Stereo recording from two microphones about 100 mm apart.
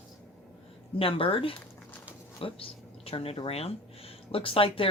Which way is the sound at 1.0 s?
65° left (ahead or behind).